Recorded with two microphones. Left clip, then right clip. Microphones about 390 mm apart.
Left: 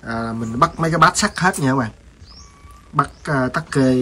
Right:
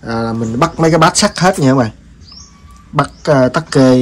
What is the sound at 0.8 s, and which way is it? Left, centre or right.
Speech, centre.